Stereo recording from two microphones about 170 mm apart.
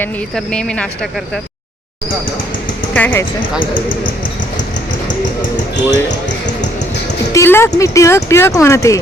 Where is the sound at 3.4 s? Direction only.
30° left (ahead or behind).